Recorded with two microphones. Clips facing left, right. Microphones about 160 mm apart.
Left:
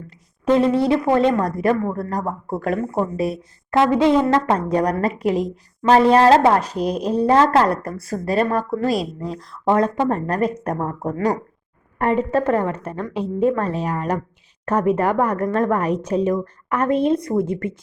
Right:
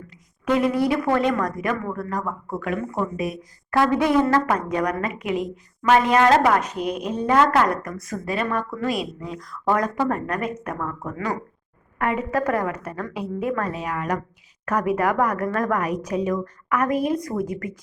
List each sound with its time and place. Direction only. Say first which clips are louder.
0.4 s speech: left 4 dB; 30° left (ahead or behind)